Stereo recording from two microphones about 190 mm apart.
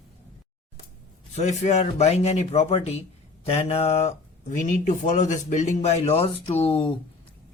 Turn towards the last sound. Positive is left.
turn(degrees=30)  # may be behind; listen again after turning